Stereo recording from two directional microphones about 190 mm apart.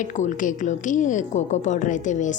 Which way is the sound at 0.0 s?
40° left (ahead or behind).